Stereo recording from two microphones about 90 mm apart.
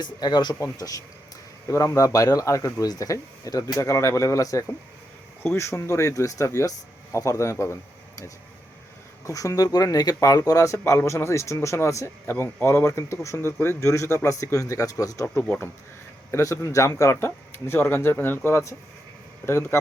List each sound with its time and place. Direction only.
0.0 s speech: 50° left (ahead or behind); by 7.8 s 30° left (ahead or behind)
9.2 s speech: 35° left (ahead or behind)
16.3 s speech: 35° left (ahead or behind)